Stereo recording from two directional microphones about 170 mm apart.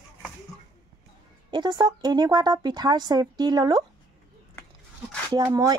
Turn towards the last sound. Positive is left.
turn(degrees=-20)  # may be behind; listen again after turning